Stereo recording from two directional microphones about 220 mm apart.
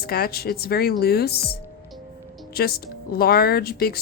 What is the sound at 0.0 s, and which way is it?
Speech, 45° left (ahead or behind).